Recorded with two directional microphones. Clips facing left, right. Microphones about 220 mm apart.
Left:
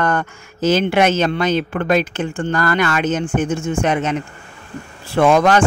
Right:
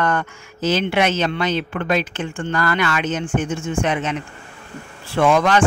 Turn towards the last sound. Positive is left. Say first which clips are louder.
# left 3 dB
turn(degrees=45)  # may be behind; listen again after turning